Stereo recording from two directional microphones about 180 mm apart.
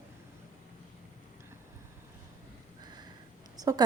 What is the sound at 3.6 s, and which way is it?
Speech, 20° right (ahead or behind).